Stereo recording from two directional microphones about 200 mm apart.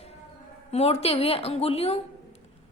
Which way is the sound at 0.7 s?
30° left (ahead or behind).